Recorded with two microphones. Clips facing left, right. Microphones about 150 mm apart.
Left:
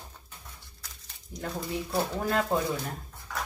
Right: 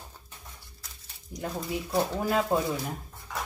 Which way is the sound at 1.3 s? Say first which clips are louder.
Right 2 dB; 15° right (ahead or behind).